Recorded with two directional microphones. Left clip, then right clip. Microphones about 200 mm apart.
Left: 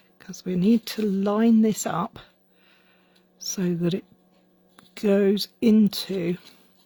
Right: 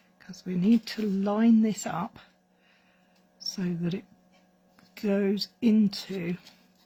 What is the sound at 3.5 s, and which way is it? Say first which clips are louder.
Speech: left 8 dB; 50° left (ahead or behind).